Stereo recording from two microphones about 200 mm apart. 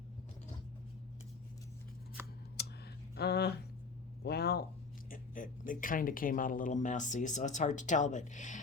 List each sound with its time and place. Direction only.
2.6 s a sound: 55° left (ahead or behind)
3.2 s speech: 55° left (ahead or behind)
5.1 s speech: 40° left (ahead or behind)